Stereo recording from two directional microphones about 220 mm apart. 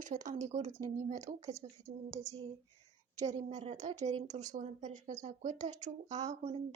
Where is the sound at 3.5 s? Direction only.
30° right (ahead or behind).